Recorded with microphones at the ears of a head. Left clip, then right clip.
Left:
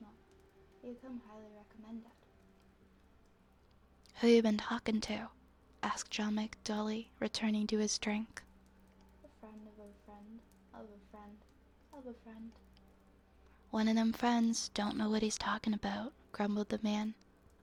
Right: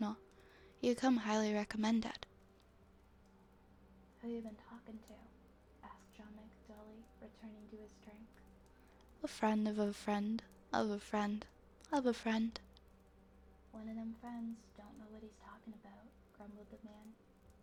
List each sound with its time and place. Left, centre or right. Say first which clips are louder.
0.8 s a woman's voice: right 15 dB; right
4.1 s speech: left 19 dB; left
9.2 s a woman's voice: right 19 dB; right
13.7 s speech: left 15 dB; left